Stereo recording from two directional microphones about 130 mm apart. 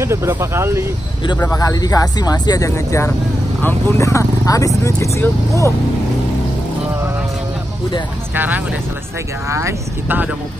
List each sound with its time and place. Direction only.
0.0 s speech: 20° right (ahead or behind)
1.5 s speech: 30° left (ahead or behind)
8.4 s speech: 10° right (ahead or behind)